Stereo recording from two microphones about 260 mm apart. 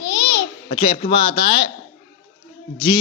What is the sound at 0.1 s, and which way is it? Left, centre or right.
Babbling, left.